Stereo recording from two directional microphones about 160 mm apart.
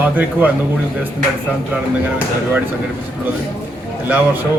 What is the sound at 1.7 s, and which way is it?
Speech, 10° right (ahead or behind).